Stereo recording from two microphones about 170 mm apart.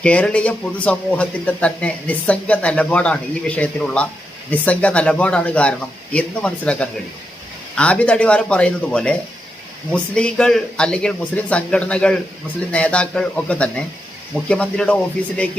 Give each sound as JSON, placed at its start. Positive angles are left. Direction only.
{"t": 0.0, "sound": "speech", "side_deg": 5}